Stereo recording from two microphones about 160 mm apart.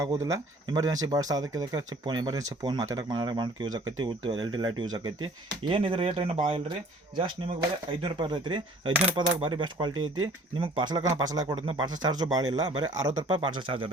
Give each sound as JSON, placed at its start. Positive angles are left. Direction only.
{"t": 0.2, "sound": "speech", "side_deg": -20}
{"t": 8.0, "sound": "speech", "side_deg": -30}
{"t": 8.9, "sound": "coin", "side_deg": -10}
{"t": 9.1, "sound": "speech", "side_deg": -30}